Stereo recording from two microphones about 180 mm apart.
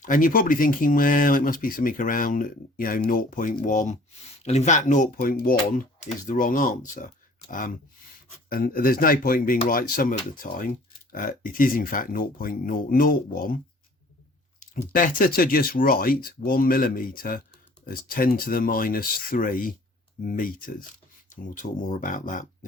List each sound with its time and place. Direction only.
0.0 s speech: 50° left (ahead or behind)
14.9 s speech: 50° left (ahead or behind)